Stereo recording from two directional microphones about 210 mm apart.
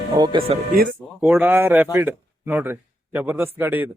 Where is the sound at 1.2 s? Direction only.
10° right (ahead or behind).